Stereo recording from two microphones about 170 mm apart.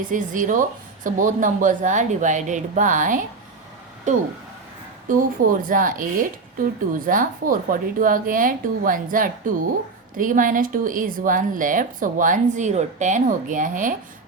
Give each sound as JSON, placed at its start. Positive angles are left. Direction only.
{"t": 0.0, "sound": "a woman's voice", "side_deg": -50}
{"t": 5.0, "sound": "a woman's voice", "side_deg": -55}